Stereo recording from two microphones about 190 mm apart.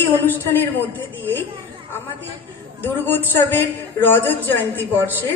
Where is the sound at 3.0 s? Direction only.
10° left (ahead or behind).